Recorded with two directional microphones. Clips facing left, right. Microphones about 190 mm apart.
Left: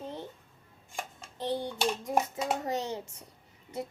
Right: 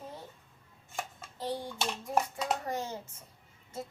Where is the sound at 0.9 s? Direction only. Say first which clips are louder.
Even; 15° left (ahead or behind).